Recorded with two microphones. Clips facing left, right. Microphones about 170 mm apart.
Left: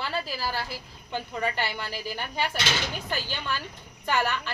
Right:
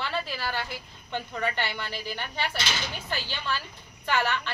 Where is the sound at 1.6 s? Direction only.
40° left (ahead or behind).